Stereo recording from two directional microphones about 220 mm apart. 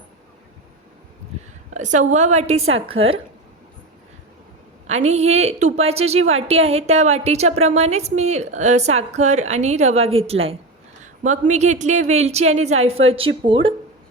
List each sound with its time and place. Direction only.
1.7 s a woman's voice: 35° right (ahead or behind)
4.9 s a woman's voice: 30° right (ahead or behind)